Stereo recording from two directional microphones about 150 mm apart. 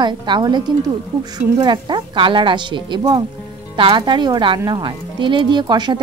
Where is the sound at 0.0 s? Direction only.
30° right (ahead or behind).